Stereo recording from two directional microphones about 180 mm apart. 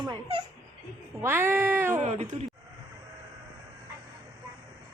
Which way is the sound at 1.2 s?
15° right (ahead or behind).